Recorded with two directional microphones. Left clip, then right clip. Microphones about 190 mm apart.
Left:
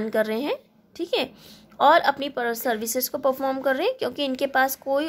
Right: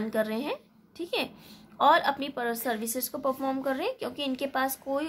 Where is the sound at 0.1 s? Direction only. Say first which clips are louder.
Left 6 dB; 30° left (ahead or behind).